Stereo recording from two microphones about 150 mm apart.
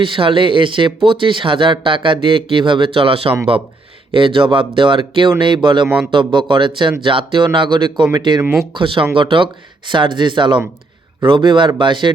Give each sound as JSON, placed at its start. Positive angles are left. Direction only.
{"t": 0.0, "sound": "speech", "side_deg": -35}
{"t": 8.4, "sound": "speech", "side_deg": -15}
{"t": 8.7, "sound": "speech", "side_deg": -35}